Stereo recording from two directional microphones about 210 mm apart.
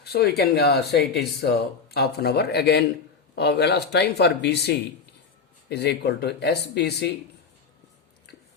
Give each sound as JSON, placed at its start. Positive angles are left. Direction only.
{"t": 0.0, "sound": "speech", "side_deg": 50}